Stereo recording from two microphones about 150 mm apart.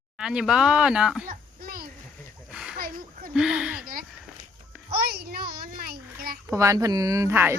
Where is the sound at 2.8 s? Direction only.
70° right (ahead or behind).